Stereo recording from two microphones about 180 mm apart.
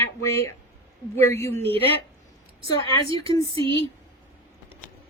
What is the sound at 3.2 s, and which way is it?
Speech, 20° left (ahead or behind).